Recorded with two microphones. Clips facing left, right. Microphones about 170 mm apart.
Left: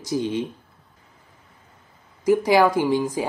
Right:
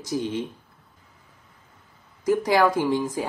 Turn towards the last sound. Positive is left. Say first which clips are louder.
# left 2 dB
turn(degrees=15)  # may be behind; listen again after turning